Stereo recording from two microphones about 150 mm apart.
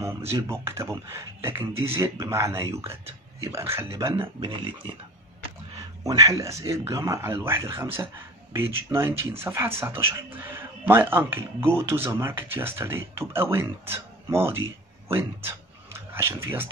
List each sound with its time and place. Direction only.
0.4 s speech: 20° right (ahead or behind)
4.2 s speech: 35° right (ahead or behind)
6.0 s speech: 25° right (ahead or behind)